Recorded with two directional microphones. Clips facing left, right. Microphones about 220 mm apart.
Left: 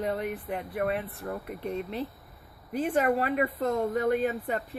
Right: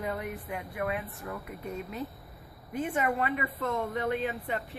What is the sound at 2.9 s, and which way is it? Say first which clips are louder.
Speech: left 5 dB; 40° left (ahead or behind).